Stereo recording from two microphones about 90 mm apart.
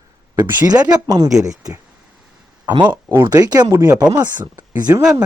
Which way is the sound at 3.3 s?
40° right (ahead or behind).